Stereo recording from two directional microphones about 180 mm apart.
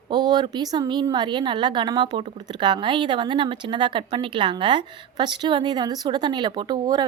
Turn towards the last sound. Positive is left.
turn(degrees=-20)  # may be behind; listen again after turning